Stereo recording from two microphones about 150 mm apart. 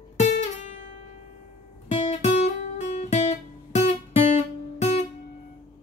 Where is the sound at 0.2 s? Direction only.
55° left (ahead or behind).